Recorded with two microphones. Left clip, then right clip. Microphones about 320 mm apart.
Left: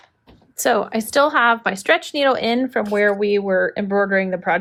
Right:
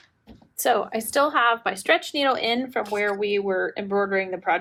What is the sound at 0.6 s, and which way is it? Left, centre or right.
Speech, left.